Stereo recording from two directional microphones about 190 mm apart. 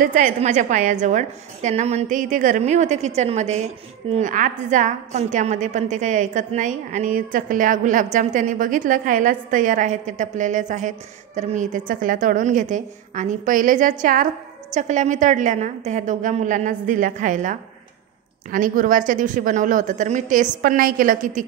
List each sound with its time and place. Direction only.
0.0 s a woman's voice: 45° right (ahead or behind)